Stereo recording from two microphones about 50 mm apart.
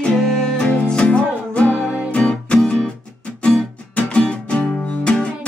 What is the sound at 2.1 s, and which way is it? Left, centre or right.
Music, left.